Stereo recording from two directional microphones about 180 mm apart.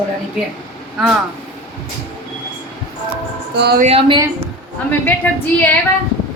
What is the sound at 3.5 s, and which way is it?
Speech, 65° right (ahead or behind).